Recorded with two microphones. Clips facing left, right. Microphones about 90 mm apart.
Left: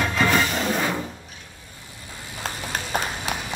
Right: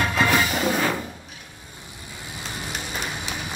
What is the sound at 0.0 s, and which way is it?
Music, 5° right (ahead or behind).